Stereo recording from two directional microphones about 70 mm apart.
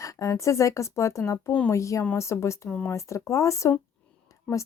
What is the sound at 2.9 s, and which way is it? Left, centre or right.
Speech, left.